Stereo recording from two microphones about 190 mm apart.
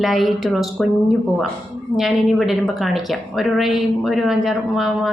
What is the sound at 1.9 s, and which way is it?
A woman's voice, centre (ahead or behind).